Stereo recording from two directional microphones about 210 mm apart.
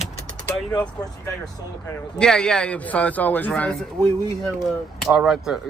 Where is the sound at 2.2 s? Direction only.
5° left (ahead or behind).